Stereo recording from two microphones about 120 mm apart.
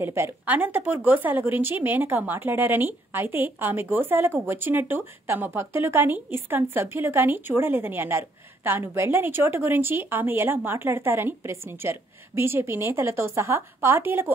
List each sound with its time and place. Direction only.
0.0 s a woman's voice: 20° right (ahead or behind)